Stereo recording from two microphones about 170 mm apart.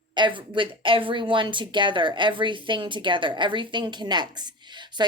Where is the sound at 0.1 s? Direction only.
30° right (ahead or behind).